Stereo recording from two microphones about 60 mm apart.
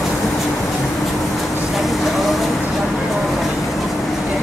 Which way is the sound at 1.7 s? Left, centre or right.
Centre.